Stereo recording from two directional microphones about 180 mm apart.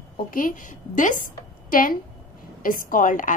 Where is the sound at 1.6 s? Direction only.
50° left (ahead or behind).